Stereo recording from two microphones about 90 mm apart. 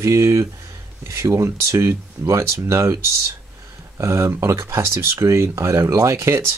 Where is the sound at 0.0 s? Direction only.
30° right (ahead or behind).